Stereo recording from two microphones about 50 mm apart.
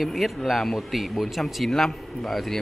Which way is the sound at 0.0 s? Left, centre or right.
Centre.